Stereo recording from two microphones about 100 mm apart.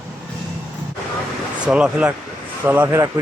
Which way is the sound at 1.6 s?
10° right (ahead or behind).